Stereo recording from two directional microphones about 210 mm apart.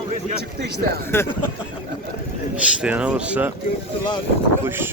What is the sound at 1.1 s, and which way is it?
Speech, 10° left (ahead or behind).